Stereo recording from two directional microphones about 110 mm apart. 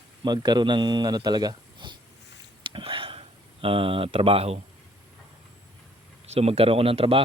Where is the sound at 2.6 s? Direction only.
50° right (ahead or behind); by 4.6 s 65° right (ahead or behind).